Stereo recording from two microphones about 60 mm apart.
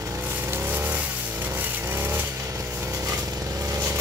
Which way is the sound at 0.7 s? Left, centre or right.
Right.